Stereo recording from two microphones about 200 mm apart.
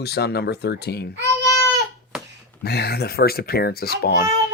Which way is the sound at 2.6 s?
55° left (ahead or behind).